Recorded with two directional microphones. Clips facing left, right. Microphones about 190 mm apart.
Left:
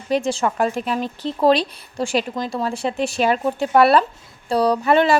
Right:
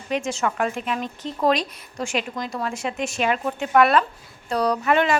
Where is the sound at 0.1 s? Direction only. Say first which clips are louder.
Left 4 dB; 35° left (ahead or behind).